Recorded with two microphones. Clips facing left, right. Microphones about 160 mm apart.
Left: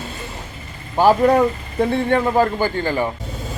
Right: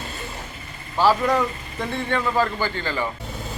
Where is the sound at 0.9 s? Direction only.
50° left (ahead or behind).